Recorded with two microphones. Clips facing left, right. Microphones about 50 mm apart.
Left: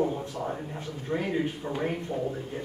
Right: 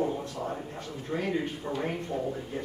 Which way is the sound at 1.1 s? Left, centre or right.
Centre.